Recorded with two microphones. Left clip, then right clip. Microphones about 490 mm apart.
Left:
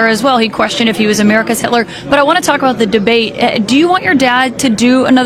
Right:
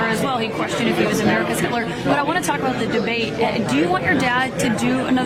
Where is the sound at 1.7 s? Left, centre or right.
Left.